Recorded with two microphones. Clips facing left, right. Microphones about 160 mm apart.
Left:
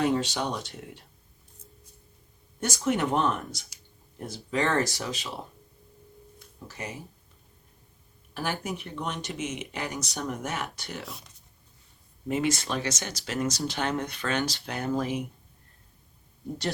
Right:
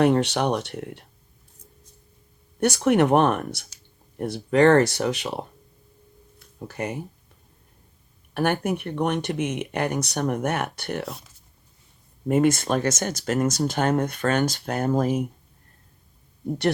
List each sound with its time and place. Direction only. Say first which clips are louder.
0.0 s speech: right 7 dB; 65° right (ahead or behind)
2.6 s speech: right 8 dB; 65° right (ahead or behind)
6.7 s speech: right 9 dB; 60° right (ahead or behind)
8.3 s a sound: right 9 dB; 60° right (ahead or behind)
8.6 s speech: right 9 dB; 60° right (ahead or behind)
12.3 s speech: right 8 dB; 50° right (ahead or behind)